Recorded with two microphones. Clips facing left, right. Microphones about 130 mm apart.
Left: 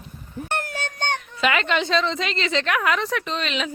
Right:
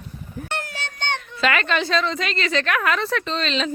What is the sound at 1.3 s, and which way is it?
A child's voice, 20° left (ahead or behind).